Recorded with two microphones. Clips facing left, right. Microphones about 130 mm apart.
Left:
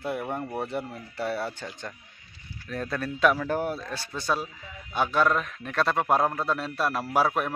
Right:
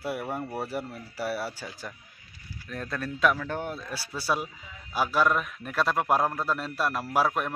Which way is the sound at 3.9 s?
5° right (ahead or behind).